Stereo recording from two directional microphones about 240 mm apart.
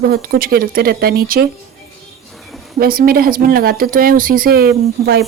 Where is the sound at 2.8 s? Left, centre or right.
Right.